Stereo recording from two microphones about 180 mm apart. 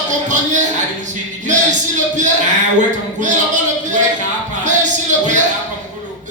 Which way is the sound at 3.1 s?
45° right (ahead or behind).